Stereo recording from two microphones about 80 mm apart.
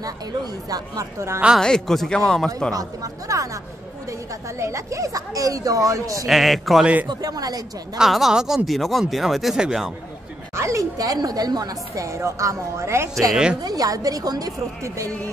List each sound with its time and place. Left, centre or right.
0.7 s speech: right
1.6 s speech: centre
2.7 s speech: right
4.6 s speech: right
6.2 s speech: centre
6.8 s a woman's voice: centre
7.1 s speech: right
8.0 s speech: centre
10.5 s speech: right
13.3 s a woman's voice: centre
13.6 s speech: right